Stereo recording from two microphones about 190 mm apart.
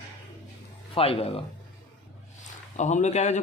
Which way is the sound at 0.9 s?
30° left (ahead or behind).